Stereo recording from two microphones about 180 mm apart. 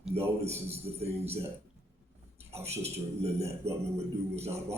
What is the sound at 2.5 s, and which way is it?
A man's voice, 35° right (ahead or behind).